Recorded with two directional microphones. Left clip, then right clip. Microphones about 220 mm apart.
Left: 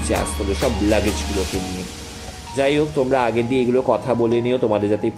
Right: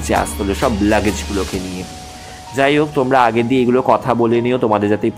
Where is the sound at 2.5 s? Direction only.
15° right (ahead or behind).